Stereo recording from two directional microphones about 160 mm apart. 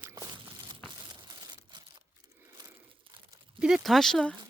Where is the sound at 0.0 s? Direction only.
15° right (ahead or behind).